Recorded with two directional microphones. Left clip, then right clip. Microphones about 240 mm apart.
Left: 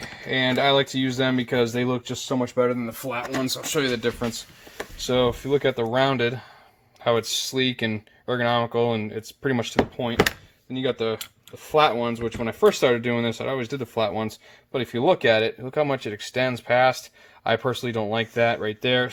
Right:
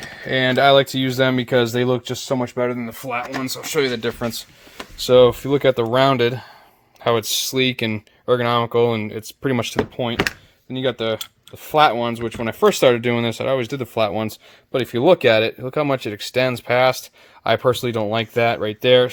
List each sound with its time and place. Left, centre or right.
0.2 s speech: right